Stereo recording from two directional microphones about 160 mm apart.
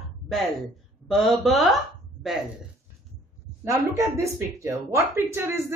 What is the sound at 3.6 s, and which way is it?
Speech, 20° right (ahead or behind).